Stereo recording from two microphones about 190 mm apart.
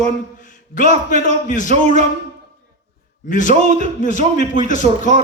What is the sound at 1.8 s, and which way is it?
Speech, 35° right (ahead or behind).